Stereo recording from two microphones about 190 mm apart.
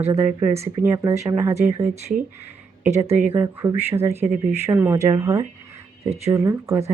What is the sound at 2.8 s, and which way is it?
A woman's voice, 15° right (ahead or behind).